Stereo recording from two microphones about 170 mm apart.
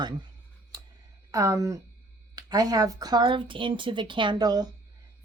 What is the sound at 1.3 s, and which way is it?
Speech, 20° right (ahead or behind).